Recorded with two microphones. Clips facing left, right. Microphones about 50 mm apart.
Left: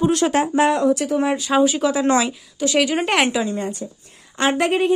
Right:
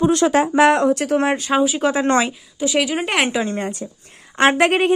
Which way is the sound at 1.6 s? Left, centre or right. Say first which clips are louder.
Left 2 dB; centre.